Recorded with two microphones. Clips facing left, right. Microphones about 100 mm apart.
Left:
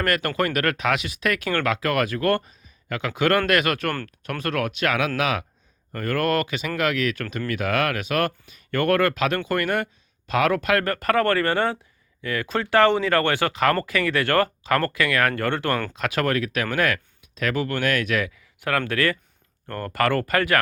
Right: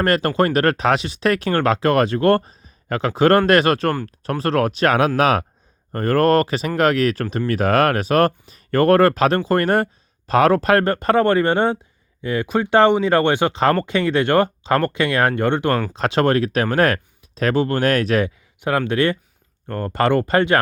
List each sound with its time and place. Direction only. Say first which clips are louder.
0.0 s speech: right 6 dB; 30° right (ahead or behind)